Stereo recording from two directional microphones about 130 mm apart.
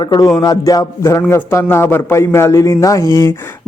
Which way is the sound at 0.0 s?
30° left (ahead or behind).